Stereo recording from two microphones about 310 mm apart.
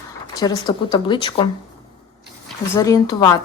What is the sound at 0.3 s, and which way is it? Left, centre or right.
A woman's voice, centre.